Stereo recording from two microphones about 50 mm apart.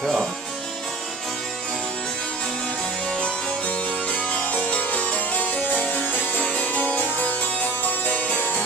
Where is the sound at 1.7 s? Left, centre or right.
Centre.